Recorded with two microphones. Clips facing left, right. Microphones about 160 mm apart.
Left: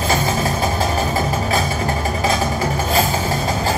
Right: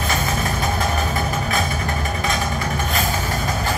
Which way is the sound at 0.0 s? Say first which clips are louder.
Left 4 dB; 30° left (ahead or behind).